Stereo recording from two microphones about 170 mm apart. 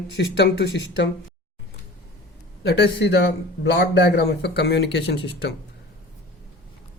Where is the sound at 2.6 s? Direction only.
75° left (ahead or behind).